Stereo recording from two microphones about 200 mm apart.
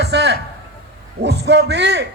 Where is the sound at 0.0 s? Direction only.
60° right (ahead or behind).